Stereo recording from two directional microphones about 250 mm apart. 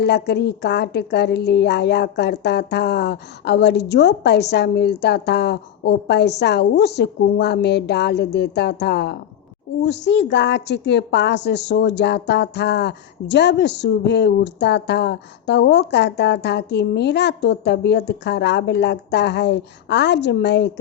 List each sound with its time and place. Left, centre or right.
0.0 s a woman's voice: left